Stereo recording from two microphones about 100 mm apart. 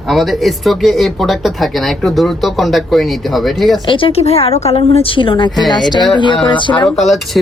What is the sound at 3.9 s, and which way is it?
A woman's voice, 60° left (ahead or behind).